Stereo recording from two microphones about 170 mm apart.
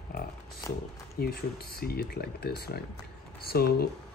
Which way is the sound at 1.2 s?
65° left (ahead or behind).